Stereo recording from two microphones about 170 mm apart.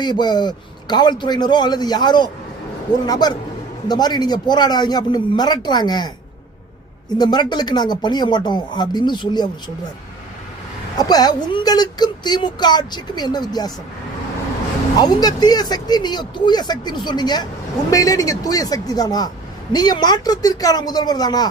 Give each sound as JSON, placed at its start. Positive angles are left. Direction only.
{"t": 0.0, "sound": "speech", "side_deg": 25}
{"t": 7.2, "sound": "speech", "side_deg": 25}
{"t": 10.9, "sound": "speech", "side_deg": 25}
{"t": 14.9, "sound": "speech", "side_deg": 25}